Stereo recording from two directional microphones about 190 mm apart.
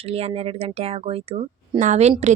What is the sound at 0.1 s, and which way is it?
Speech, 30° right (ahead or behind).